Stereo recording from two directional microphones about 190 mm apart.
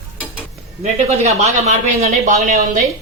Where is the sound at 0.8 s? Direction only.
35° right (ahead or behind).